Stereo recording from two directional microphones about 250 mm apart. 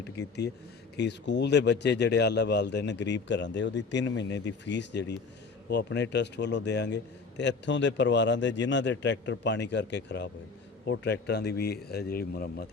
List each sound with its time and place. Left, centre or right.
0.2 s a man's voice: left